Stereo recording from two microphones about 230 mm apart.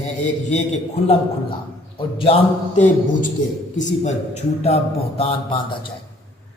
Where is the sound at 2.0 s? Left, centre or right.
Left.